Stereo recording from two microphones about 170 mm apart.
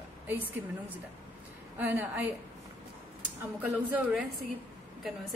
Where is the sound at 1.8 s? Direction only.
10° right (ahead or behind).